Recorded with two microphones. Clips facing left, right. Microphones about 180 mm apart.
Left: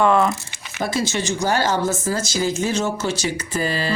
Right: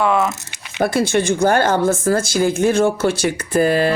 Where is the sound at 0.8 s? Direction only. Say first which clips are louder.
Right 6 dB; 55° right (ahead or behind).